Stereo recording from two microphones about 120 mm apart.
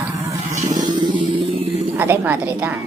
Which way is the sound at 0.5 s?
90° right.